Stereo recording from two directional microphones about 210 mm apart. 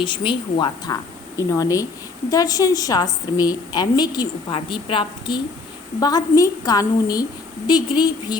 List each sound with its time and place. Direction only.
0.0 s a woman's voice: 20° left (ahead or behind)